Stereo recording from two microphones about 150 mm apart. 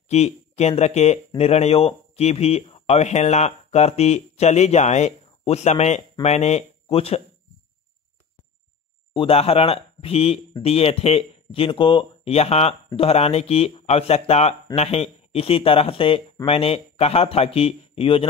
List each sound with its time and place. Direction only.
0.1 s speech: 45° left (ahead or behind)
9.1 s speech: 40° left (ahead or behind)